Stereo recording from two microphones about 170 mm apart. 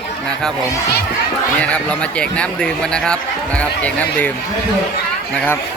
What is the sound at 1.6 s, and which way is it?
Speech, 5° left (ahead or behind).